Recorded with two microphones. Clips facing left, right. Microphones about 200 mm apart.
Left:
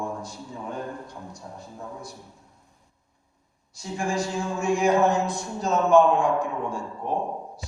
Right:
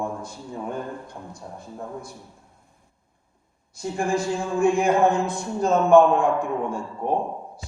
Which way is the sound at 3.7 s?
55° right (ahead or behind).